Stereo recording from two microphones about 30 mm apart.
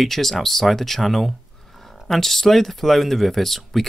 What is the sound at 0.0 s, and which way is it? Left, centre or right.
Speech, centre.